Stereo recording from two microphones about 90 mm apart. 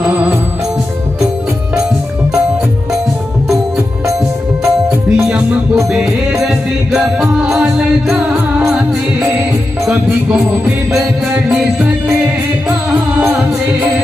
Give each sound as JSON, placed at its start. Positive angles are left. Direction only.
{"t": 5.1, "sound": "music", "side_deg": -10}
{"t": 13.3, "sound": "music", "side_deg": -15}